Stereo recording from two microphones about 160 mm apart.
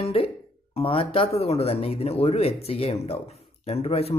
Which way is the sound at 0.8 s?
35° left (ahead or behind).